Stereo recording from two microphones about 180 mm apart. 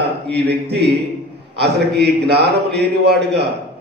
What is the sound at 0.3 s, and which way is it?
A man's voice, 65° right (ahead or behind).